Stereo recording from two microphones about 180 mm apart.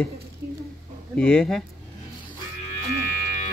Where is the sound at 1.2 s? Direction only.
5° left (ahead or behind).